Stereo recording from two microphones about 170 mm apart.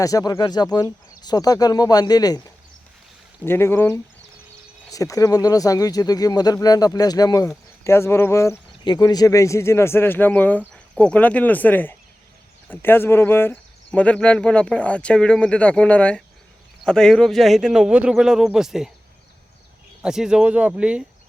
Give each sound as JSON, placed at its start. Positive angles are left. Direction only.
{"t": 0.0, "sound": "speech", "side_deg": 20}
{"t": 3.4, "sound": "speech", "side_deg": 15}
{"t": 20.0, "sound": "speech", "side_deg": -5}